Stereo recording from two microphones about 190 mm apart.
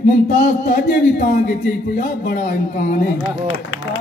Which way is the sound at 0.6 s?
55° left (ahead or behind).